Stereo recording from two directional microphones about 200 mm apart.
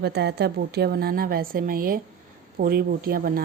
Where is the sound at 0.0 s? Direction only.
55° right (ahead or behind).